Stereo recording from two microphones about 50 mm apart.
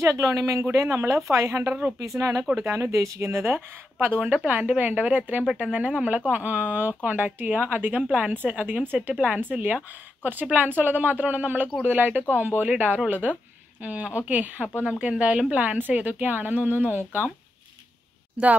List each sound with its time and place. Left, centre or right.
0.0 s speech: right
2.6 s speech: right
2.9 s speech: right
4.5 s a woman's voice: right